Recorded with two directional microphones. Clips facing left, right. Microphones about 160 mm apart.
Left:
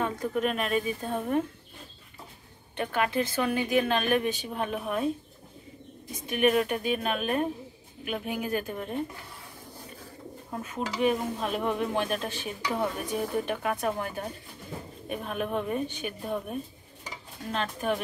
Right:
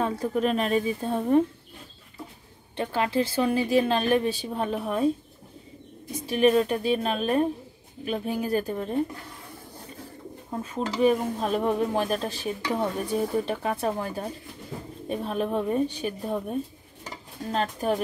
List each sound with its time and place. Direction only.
0.0 s a woman's voice: 30° right (ahead or behind)
2.7 s a woman's voice: 30° right (ahead or behind)
6.2 s a woman's voice: 30° right (ahead or behind)
10.5 s a woman's voice: 30° right (ahead or behind)